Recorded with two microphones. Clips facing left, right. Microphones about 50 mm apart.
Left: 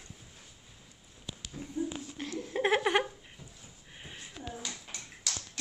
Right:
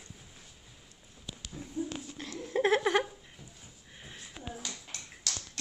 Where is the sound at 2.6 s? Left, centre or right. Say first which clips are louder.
Right 1 dB; left.